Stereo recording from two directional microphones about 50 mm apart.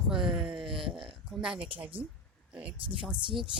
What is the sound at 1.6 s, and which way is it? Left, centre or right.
Speech, right.